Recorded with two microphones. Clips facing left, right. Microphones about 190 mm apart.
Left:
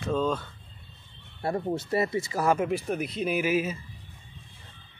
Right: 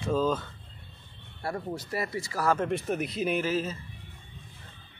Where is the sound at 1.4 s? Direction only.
25° left (ahead or behind).